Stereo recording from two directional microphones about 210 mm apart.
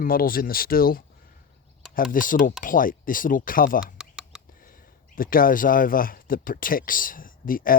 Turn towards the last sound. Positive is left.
turn(degrees=40)  # may be behind; listen again after turning